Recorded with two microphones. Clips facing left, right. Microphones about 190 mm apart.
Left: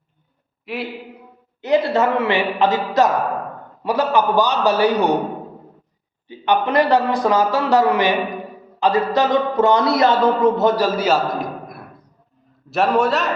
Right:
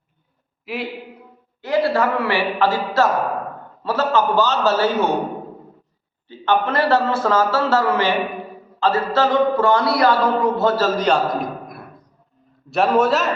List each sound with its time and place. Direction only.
0.6 s a man's voice: centre (ahead or behind)
1.6 s a man's voice: 20° left (ahead or behind)
6.2 s a man's voice: 15° left (ahead or behind); by 13.3 s centre (ahead or behind)